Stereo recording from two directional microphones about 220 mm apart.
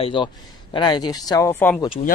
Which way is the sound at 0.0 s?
20° left (ahead or behind).